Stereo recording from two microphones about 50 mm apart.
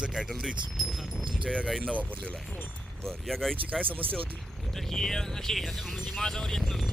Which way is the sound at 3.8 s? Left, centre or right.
Right.